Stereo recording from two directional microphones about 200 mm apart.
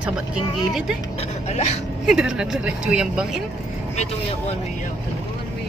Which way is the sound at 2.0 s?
5° right (ahead or behind).